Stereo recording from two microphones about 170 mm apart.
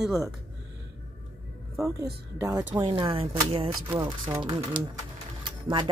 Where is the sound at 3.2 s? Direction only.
35° right (ahead or behind).